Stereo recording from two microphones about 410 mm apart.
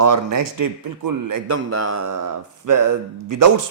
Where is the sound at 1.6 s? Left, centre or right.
Right.